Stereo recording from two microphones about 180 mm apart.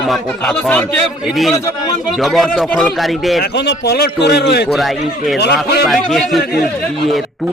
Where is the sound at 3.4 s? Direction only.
65° left (ahead or behind).